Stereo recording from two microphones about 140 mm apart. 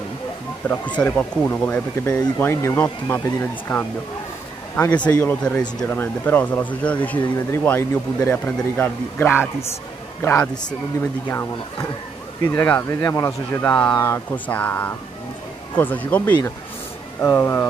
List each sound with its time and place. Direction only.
0.6 s speech: 10° left (ahead or behind)